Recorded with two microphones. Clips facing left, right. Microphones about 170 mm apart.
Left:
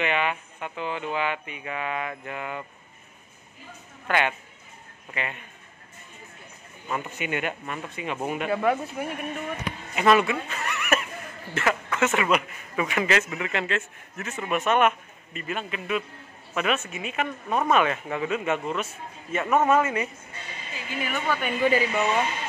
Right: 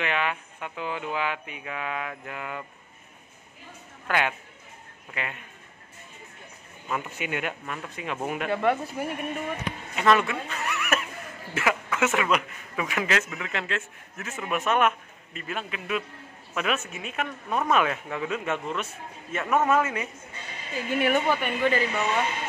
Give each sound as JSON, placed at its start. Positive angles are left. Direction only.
{"t": 0.0, "sound": "speech", "side_deg": 0}
{"t": 4.1, "sound": "speech", "side_deg": 0}
{"t": 6.9, "sound": "speech", "side_deg": 0}
{"t": 20.9, "sound": "a woman's voice", "side_deg": -60}
{"t": 21.4, "sound": "speech", "side_deg": 0}